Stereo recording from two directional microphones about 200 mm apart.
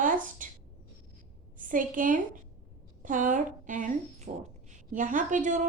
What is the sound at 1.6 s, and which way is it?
A woman's voice, 40° right (ahead or behind).